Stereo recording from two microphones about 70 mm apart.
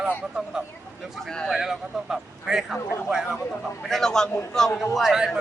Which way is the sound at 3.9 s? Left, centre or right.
Centre.